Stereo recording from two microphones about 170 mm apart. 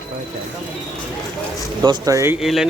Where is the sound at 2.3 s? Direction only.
Centre (ahead or behind).